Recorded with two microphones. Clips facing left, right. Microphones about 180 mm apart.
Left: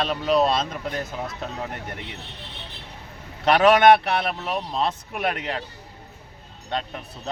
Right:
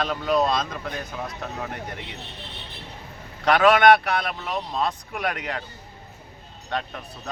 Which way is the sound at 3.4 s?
25° left (ahead or behind).